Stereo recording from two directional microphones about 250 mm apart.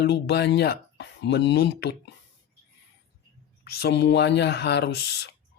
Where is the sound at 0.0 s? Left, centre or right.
Left.